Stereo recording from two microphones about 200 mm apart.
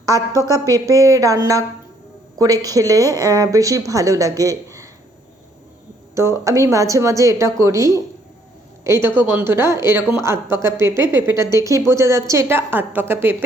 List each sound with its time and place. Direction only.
0.0 s a woman's voice: 15° right (ahead or behind)
2.4 s speech: 20° right (ahead or behind)
6.4 s speech: 15° right (ahead or behind)